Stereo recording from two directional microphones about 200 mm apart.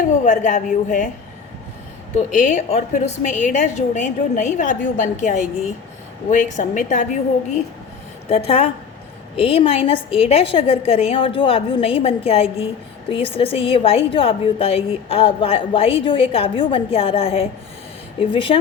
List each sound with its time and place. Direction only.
0.1 s a woman's voice: 40° left (ahead or behind)
2.1 s a woman's voice: 40° left (ahead or behind)
8.3 s a woman's voice: 30° left (ahead or behind)